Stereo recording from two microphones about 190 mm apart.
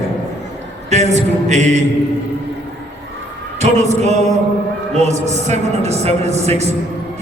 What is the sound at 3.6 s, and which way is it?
A man's voice, 35° right (ahead or behind).